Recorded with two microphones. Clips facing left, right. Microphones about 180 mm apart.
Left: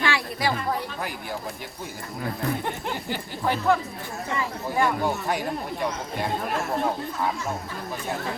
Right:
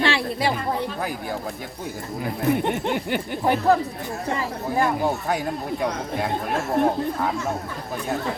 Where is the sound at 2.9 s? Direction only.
65° right (ahead or behind).